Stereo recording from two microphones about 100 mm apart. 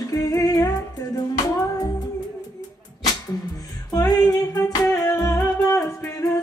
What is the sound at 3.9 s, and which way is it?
Music, 35° left (ahead or behind).